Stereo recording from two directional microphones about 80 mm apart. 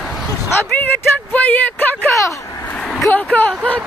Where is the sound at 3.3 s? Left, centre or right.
Centre.